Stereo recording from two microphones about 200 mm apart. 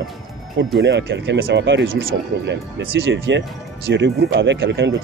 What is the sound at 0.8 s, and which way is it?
Speech, 60° right (ahead or behind).